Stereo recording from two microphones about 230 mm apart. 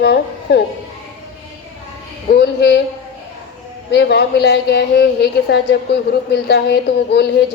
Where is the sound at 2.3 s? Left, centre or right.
Left.